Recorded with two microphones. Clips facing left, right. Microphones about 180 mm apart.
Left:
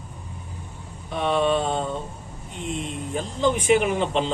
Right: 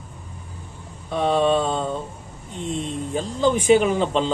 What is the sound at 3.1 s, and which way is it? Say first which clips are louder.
Speech: right 2 dB; 30° right (ahead or behind).